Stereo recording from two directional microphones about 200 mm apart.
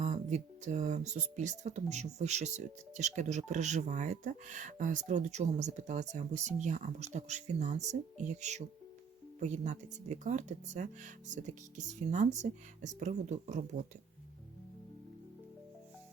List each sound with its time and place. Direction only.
0.0 s speech: 35° right (ahead or behind)